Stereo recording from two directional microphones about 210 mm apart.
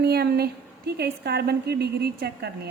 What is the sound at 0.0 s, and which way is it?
A woman's voice, 50° right (ahead or behind).